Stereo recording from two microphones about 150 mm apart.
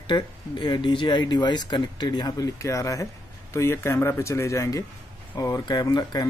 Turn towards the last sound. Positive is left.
turn(degrees=25)  # may be behind; listen again after turning